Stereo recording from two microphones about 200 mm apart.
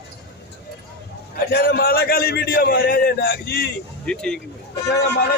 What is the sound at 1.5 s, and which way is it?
A man's voice, 50° left (ahead or behind).